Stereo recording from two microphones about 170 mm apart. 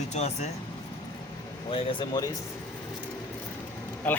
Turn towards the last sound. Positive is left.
turn(degrees=10)  # may be behind; listen again after turning